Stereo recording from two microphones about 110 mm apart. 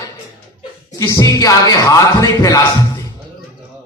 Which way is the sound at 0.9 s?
30° left (ahead or behind).